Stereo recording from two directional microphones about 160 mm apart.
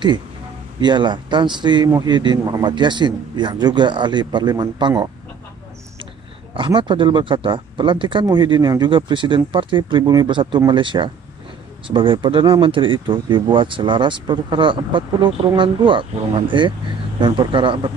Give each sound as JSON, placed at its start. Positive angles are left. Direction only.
{"t": 0.7, "sound": "a man's voice", "side_deg": -30}
{"t": 6.5, "sound": "speech", "side_deg": -30}